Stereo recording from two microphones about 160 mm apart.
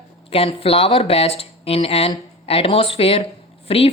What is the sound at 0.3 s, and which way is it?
Speech, 35° left (ahead or behind).